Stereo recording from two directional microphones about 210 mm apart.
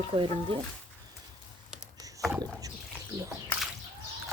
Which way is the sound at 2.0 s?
15° right (ahead or behind).